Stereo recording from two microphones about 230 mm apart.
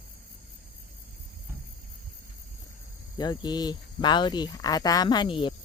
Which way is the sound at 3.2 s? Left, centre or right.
Centre.